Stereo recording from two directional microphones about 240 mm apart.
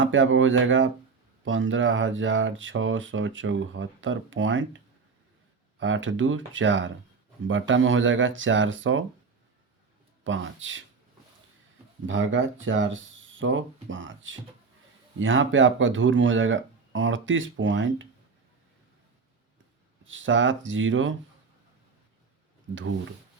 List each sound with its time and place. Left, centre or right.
0.0 s speech: right
5.8 s speech: right
10.2 s speech: right
12.0 s speech: right
20.1 s speech: right
22.7 s speech: right